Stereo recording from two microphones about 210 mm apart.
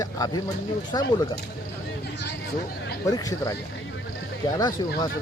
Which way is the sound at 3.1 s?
15° left (ahead or behind).